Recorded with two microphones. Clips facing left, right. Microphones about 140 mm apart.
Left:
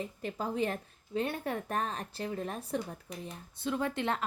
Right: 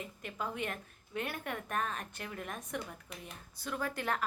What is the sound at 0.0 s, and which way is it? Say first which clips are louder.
A woman's voice: left 4 dB; 35° left (ahead or behind).